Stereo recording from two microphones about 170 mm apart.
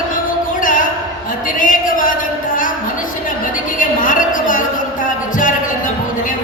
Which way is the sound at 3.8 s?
50° left (ahead or behind).